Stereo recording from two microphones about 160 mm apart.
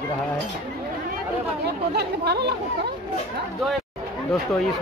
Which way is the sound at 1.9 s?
90° right.